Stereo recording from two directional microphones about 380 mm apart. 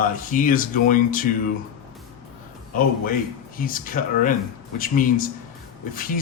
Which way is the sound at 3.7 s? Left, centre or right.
Left.